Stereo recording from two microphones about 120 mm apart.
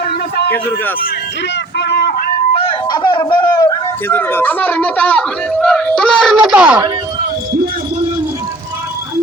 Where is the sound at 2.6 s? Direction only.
40° left (ahead or behind).